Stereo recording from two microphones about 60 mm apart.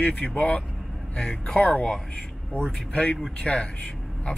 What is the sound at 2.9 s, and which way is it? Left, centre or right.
Speech, left.